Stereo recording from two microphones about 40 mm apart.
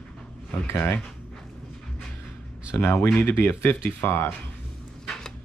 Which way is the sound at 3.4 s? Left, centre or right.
Left.